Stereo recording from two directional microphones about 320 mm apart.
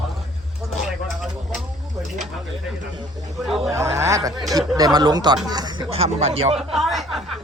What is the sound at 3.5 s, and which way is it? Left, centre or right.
Speech, centre.